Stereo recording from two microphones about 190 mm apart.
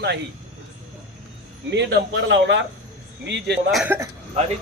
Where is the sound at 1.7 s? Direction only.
65° right (ahead or behind).